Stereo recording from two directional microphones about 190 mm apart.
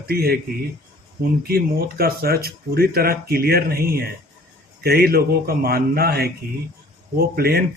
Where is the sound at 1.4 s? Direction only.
50° right (ahead or behind).